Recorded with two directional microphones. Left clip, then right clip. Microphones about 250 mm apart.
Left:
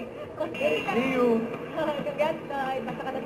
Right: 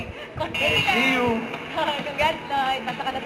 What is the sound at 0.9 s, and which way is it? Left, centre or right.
A woman's voice, centre.